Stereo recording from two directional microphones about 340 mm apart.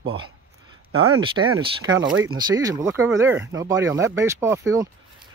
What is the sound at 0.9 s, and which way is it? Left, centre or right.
Speech, right.